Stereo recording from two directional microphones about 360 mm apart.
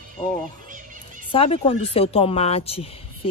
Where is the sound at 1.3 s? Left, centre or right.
Centre.